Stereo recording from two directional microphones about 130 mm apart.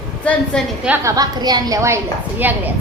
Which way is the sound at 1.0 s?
30° right (ahead or behind).